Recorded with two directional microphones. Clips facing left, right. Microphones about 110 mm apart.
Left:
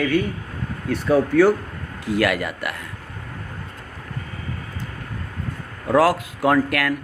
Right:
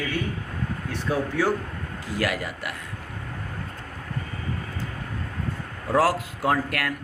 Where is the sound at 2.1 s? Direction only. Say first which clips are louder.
Left 7 dB; 70° left (ahead or behind).